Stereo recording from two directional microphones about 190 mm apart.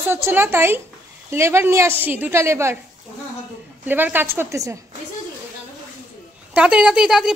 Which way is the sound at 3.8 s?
10° right (ahead or behind).